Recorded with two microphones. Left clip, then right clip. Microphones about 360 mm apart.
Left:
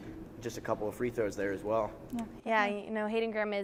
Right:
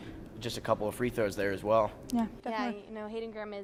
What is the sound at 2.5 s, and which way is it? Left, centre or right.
A woman's voice, left.